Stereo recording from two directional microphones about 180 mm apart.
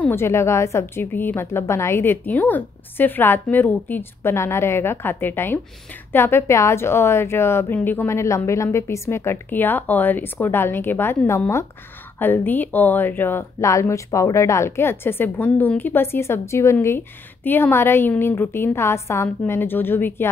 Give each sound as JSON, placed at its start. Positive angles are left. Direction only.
{"t": 0.0, "sound": "speech", "side_deg": 15}